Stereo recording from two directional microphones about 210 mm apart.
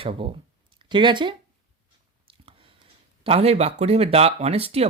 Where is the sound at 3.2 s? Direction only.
30° right (ahead or behind).